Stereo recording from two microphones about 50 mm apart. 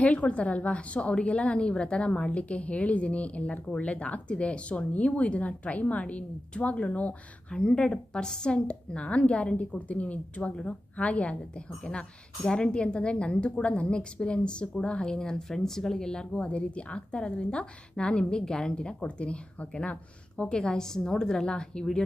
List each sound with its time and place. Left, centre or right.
0.0 s a woman's voice: left
7.5 s a woman's voice: centre
20.4 s a woman's voice: centre